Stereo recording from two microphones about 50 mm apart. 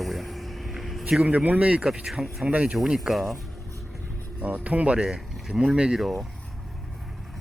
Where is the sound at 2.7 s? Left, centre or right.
Centre.